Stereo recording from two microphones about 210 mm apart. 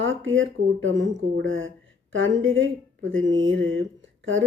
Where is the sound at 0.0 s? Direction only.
65° right (ahead or behind).